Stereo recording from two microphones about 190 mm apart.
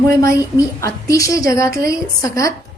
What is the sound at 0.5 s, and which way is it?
A woman's voice, 15° left (ahead or behind).